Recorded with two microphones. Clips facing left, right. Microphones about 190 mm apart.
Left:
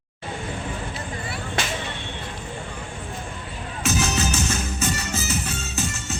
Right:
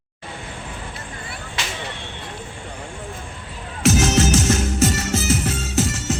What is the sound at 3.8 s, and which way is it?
Music, 90° right.